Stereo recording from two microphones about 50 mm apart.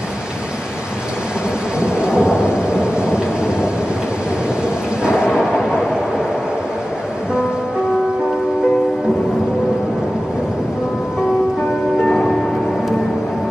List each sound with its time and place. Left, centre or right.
1.8 s thunder: centre
5.0 s a sound: centre
12.0 s music: centre